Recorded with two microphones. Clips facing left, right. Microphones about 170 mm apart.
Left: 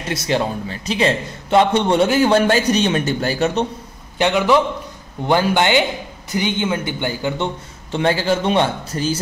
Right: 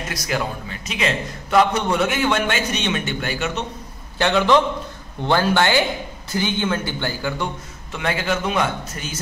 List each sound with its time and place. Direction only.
0.1 s a man's voice: 25° left (ahead or behind)
4.2 s a man's voice: 15° left (ahead or behind)
7.9 s a man's voice: 30° left (ahead or behind)